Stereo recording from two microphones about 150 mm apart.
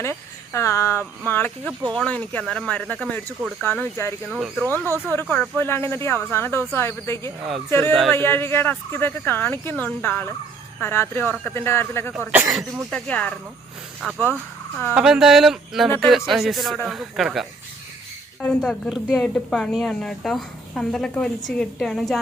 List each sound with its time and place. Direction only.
0.0 s speech: 20° left (ahead or behind)
4.3 s speech: centre (ahead or behind)
4.9 s speech: 15° left (ahead or behind); by 17.4 s centre (ahead or behind)
18.4 s speech: 5° left (ahead or behind)